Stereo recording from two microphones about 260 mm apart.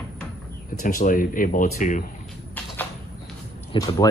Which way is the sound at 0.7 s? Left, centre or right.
Left.